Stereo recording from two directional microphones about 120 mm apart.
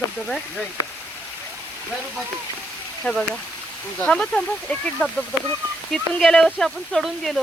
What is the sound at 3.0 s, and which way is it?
Speech, 5° left (ahead or behind).